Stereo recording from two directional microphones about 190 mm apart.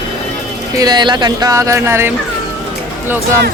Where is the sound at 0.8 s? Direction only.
20° right (ahead or behind).